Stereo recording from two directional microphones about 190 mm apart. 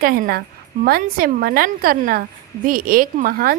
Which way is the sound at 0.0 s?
50° right (ahead or behind).